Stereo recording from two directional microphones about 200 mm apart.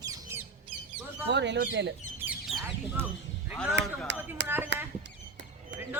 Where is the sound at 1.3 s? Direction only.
60° right (ahead or behind).